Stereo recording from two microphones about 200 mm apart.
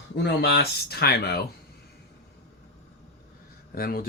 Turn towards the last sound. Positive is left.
turn(degrees=50)  # may be behind; listen again after turning